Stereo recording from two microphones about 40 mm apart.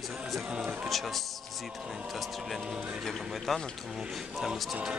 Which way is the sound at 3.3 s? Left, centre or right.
Centre.